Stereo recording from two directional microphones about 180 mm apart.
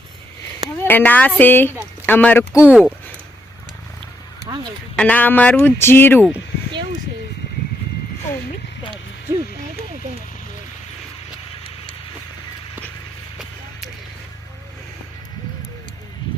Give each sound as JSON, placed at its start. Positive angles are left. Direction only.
{"t": 0.9, "sound": "speech", "side_deg": 10}
{"t": 2.5, "sound": "speech", "side_deg": -5}
{"t": 4.4, "sound": "quack", "side_deg": -25}
{"t": 4.9, "sound": "speech", "side_deg": 10}